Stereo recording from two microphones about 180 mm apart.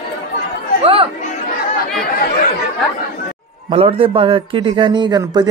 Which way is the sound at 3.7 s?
30° right (ahead or behind).